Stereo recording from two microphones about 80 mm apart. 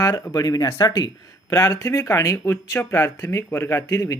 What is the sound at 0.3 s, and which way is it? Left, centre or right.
Speech, left.